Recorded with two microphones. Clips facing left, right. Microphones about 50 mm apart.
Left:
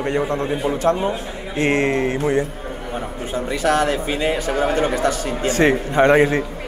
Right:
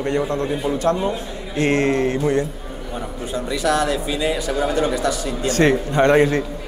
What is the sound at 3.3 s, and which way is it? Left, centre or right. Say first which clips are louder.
Speech: left 1 dB; left.